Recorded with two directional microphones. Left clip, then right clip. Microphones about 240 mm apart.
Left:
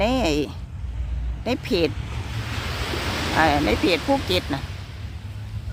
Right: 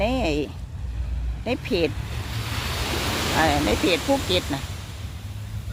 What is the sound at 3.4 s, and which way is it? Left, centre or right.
Speech, centre.